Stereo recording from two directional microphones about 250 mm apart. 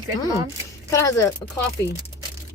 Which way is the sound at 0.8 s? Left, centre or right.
Centre.